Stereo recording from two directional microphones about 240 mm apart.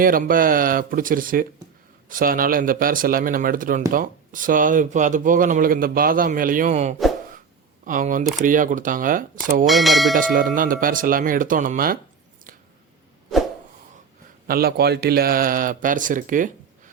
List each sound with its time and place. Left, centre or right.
0.0 s speech: right
9.6 s speech: centre
10.2 s speech: right
14.4 s speech: right